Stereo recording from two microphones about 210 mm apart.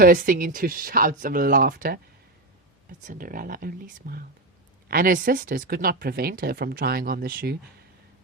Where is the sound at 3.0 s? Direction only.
40° right (ahead or behind).